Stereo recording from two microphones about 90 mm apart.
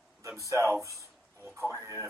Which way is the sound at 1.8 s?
35° right (ahead or behind).